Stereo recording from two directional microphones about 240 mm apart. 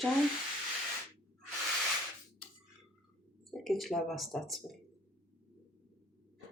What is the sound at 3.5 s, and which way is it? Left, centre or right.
Speech, centre.